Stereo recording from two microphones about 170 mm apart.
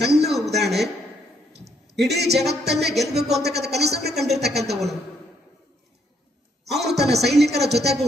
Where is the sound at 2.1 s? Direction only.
75° right (ahead or behind).